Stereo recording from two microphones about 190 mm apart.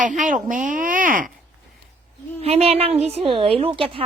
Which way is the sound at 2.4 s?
30° right (ahead or behind).